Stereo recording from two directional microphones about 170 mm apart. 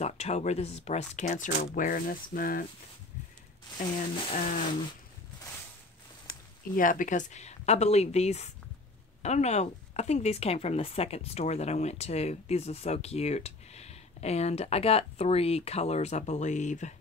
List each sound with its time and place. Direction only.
0.0 s speech: 40° left (ahead or behind); by 2.6 s 55° left (ahead or behind)
3.8 s speech: 30° left (ahead or behind)
4.4 s speech: 45° left (ahead or behind)
6.2 s speech: 55° left (ahead or behind)